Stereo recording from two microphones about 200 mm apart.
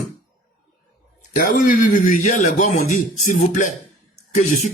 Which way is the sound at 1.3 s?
40° left (ahead or behind).